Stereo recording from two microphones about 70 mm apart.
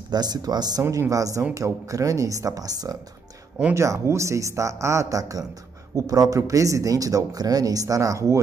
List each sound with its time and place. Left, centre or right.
0.1 s speech: right
1.1 s speech: right
3.7 s speech: right